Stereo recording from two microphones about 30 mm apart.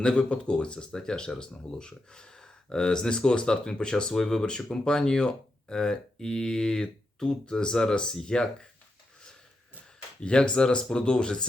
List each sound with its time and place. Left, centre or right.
0.0 s speech: left
4.1 s speech: centre
6.8 s speech: left
10.2 s speech: left